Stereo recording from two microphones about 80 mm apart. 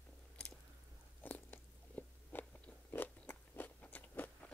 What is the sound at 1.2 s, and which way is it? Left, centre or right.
Biting, left.